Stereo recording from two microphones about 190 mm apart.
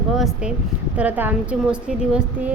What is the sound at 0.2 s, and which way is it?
A woman's voice, centre (ahead or behind).